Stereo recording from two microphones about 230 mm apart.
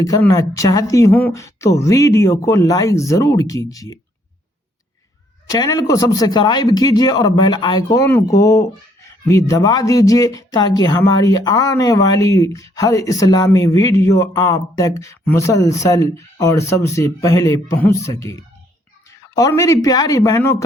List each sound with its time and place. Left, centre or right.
0.0 s speech: centre
5.5 s speech: centre
19.4 s speech: centre